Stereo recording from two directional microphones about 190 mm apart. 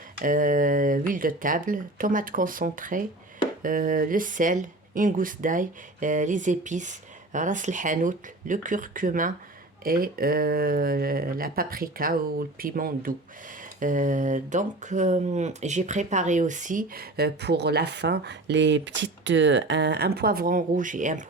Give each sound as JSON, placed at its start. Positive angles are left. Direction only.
{"t": 0.2, "sound": "speech", "side_deg": -45}